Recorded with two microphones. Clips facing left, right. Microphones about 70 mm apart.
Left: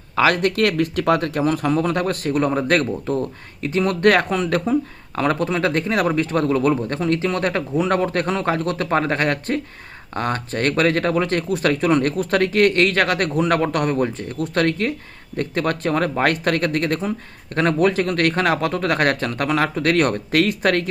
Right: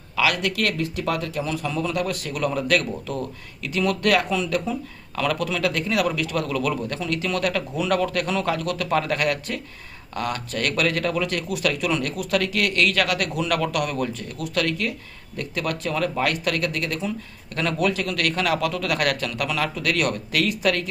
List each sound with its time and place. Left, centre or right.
0.2 s speech: left